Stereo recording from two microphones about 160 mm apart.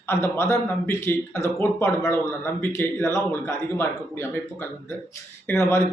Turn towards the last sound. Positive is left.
turn(degrees=15)  # may be behind; listen again after turning